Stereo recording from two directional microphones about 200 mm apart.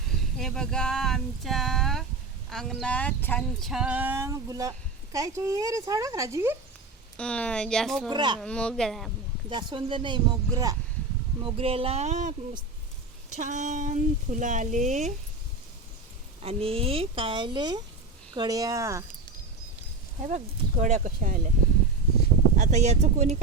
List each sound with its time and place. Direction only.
0.3 s speech: centre (ahead or behind)
2.5 s a sound: centre (ahead or behind); by 4.7 s 15° right (ahead or behind)
5.1 s speech: 15° right (ahead or behind)
7.2 s a sound: 5° left (ahead or behind)
8.1 s speech: 20° right (ahead or behind)
8.4 s a sound: 5° left (ahead or behind)
9.5 s speech: 25° right (ahead or behind)
13.3 s speech: 40° right (ahead or behind)
16.4 s speech: 30° right (ahead or behind)
20.2 s speech: 35° right (ahead or behind)
22.5 s speech: 40° right (ahead or behind)